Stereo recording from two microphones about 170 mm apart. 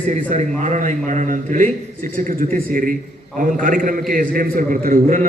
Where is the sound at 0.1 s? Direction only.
45° right (ahead or behind).